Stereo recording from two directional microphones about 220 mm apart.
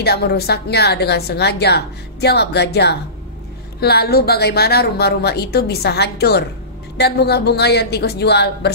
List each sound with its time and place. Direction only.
0.0 s a woman's voice: 45° left (ahead or behind)